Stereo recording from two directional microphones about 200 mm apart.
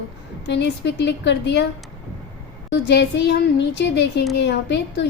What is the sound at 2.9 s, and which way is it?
A woman's voice, 60° left (ahead or behind).